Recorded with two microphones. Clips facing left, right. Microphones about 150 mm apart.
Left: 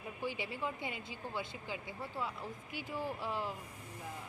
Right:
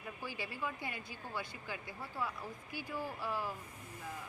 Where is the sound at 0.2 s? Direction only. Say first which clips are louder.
Left 4 dB; 20° left (ahead or behind).